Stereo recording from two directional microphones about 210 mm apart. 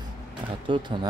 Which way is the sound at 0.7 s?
20° right (ahead or behind).